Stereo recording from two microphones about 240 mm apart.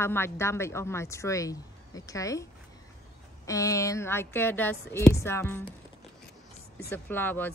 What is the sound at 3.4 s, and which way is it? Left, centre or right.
Speech, centre.